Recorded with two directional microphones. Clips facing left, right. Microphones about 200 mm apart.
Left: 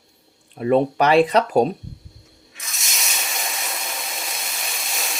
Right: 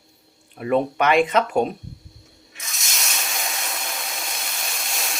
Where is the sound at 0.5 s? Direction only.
30° left (ahead or behind).